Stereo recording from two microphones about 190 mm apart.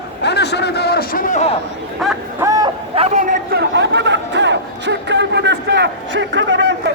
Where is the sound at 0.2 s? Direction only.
60° left (ahead or behind); by 1.5 s 40° left (ahead or behind).